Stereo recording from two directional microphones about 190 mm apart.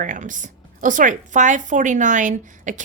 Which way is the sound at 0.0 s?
40° right (ahead or behind).